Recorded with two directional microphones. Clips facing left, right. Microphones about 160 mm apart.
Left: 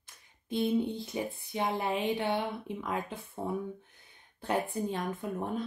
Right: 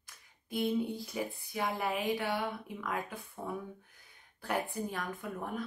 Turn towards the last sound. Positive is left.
turn(degrees=25)  # may be behind; listen again after turning